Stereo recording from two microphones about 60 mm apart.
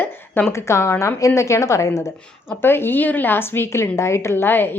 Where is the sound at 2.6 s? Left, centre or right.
Left.